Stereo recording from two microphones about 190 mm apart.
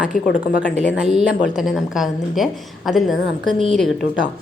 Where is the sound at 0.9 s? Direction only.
5° right (ahead or behind).